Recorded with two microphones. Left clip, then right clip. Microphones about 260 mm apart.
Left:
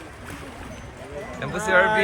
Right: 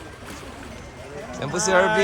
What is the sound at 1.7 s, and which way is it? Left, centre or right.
Speech, centre.